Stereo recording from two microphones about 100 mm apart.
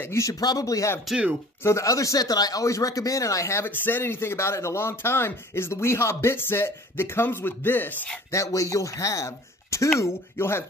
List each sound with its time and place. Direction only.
0.0 s speech: 30° left (ahead or behind)
1.0 s speech: 5° right (ahead or behind)
1.6 s speech: 30° left (ahead or behind)
8.3 s speech: 30° left (ahead or behind)